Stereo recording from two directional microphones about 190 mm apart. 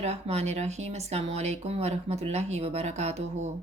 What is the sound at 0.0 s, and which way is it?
Speech, 35° right (ahead or behind).